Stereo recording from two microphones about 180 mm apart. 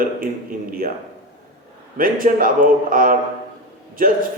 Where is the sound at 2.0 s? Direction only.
50° right (ahead or behind).